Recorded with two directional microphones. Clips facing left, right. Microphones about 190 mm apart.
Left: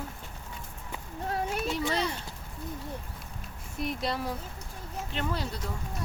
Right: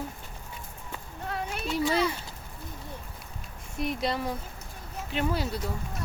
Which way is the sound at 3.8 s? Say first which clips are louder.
Right 2 dB; centre (ahead or behind).